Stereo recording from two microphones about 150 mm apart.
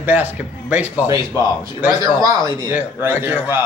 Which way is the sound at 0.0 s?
10° right (ahead or behind).